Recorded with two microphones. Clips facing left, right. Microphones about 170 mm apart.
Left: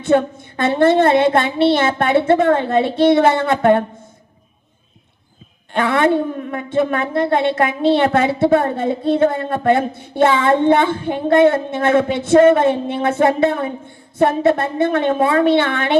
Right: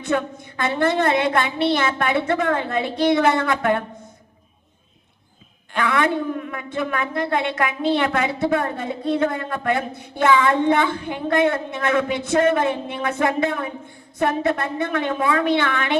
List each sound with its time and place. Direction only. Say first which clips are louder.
0.0 s a woman's voice: left 8 dB; 30° left (ahead or behind)
5.7 s a woman's voice: left 5 dB; 30° left (ahead or behind)